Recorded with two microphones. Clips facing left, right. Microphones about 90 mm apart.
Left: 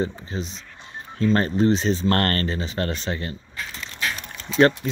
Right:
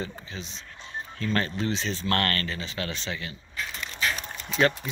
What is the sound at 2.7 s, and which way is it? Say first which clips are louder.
Speech: left 6 dB; 45° left (ahead or behind).